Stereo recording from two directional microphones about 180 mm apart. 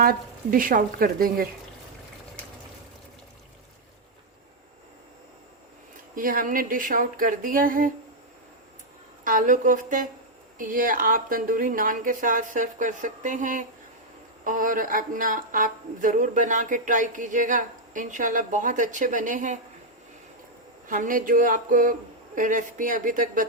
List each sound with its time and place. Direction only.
0.0 s speech: 50° right (ahead or behind)
6.1 s speech: 50° right (ahead or behind)
9.2 s speech: 45° right (ahead or behind)
20.8 s speech: 45° right (ahead or behind)